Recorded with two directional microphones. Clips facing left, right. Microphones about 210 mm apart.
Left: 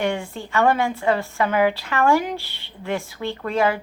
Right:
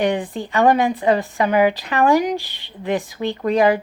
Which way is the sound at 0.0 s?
15° right (ahead or behind).